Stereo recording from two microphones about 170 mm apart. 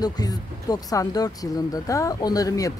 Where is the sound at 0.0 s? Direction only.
20° left (ahead or behind).